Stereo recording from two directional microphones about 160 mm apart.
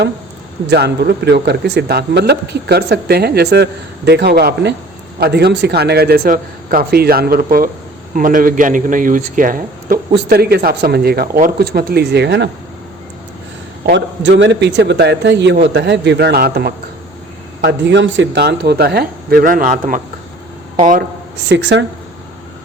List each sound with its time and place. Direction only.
0.7 s a man's voice: 90° right; by 10.0 s 60° right (ahead or behind)
10.2 s a man's voice: 75° right (ahead or behind); by 12.5 s 90° right
13.8 s speech: 90° right; by 16.7 s 75° right (ahead or behind)
17.6 s a man's voice: 90° right; by 20.0 s 55° right (ahead or behind)
21.5 s speech: 90° right